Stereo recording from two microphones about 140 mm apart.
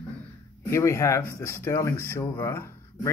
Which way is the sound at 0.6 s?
20° left (ahead or behind).